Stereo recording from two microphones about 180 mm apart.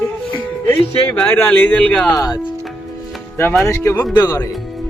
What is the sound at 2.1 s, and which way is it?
Speech, 20° left (ahead or behind).